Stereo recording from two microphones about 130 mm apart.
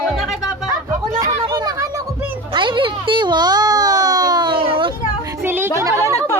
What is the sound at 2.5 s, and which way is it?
Music, 40° right (ahead or behind).